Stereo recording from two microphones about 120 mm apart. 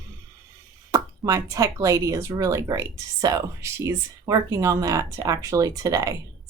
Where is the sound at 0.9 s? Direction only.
30° right (ahead or behind).